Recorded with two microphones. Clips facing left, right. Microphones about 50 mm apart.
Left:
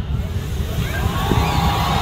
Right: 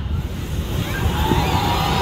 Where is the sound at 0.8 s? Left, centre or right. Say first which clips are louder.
Even; centre.